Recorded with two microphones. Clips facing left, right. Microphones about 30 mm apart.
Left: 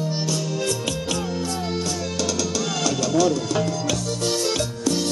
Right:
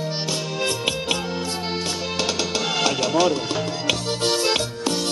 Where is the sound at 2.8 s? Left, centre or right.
Right.